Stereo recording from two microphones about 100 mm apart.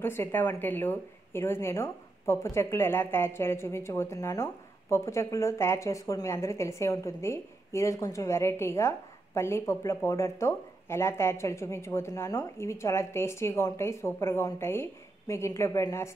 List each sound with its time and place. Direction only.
0.0 s speech: 25° left (ahead or behind)